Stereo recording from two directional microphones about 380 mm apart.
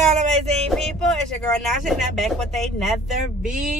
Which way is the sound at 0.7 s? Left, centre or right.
Centre.